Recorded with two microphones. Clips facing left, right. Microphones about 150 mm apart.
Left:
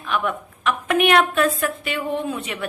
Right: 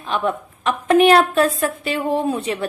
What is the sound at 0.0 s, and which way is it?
A woman's voice, 30° right (ahead or behind).